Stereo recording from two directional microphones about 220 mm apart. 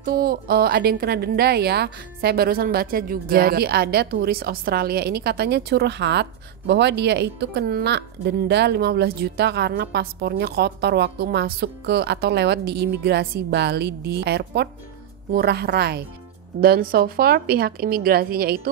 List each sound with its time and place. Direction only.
0.0 s a woman's voice: 40° right (ahead or behind)